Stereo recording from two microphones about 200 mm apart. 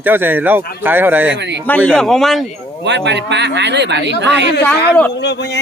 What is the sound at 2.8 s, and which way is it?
Speech, 60° right (ahead or behind).